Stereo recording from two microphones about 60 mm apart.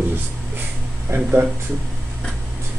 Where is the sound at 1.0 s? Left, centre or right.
Right.